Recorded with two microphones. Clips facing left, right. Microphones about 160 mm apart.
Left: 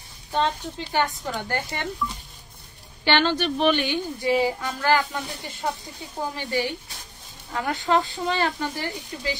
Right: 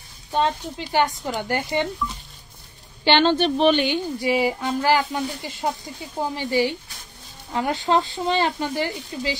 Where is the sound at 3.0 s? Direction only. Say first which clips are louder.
Right 4 dB; 25° right (ahead or behind).